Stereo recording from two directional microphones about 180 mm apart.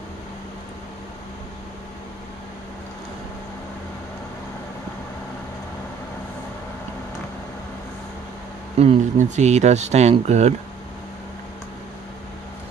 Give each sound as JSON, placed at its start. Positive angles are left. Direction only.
{"t": 8.7, "sound": "speech", "side_deg": -40}